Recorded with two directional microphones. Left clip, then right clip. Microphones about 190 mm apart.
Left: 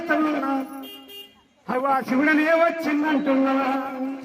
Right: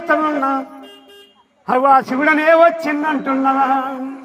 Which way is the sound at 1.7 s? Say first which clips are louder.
Right 10 dB; 55° right (ahead or behind).